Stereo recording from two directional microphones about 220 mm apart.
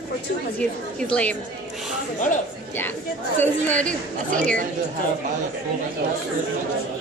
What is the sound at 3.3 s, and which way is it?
Speech, 5° left (ahead or behind).